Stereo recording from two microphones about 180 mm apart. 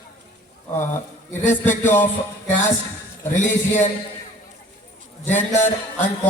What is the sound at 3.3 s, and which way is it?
Speech, 45° left (ahead or behind).